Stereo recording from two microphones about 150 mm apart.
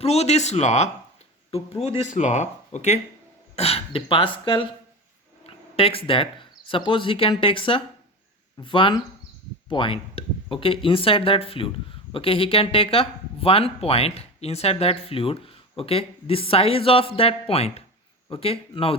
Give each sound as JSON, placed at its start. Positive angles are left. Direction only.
{"t": 0.0, "sound": "speech", "side_deg": 45}
{"t": 2.1, "sound": "speech", "side_deg": 50}